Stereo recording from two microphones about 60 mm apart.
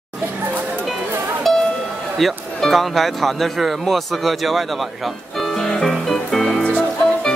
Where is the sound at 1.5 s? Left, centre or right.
Centre.